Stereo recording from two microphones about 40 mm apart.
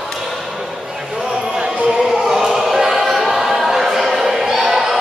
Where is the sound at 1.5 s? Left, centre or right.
Right.